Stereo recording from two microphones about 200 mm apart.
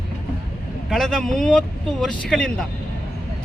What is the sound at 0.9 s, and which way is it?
Speech, centre (ahead or behind).